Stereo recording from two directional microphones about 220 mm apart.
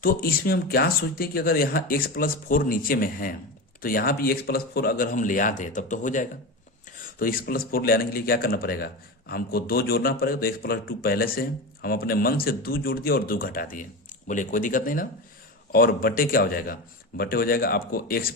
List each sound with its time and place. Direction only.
0.0 s speech: 40° left (ahead or behind)